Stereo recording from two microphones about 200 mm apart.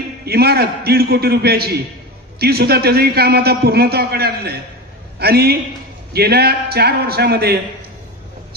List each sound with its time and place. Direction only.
0.2 s a man's voice: 50° right (ahead or behind)